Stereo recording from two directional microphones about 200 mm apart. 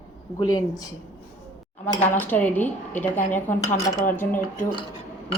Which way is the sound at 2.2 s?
10° left (ahead or behind).